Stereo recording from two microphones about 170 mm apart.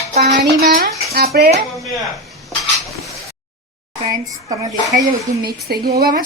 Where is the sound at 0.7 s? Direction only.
55° right (ahead or behind).